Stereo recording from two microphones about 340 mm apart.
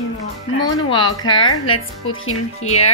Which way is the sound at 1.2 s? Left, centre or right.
Centre.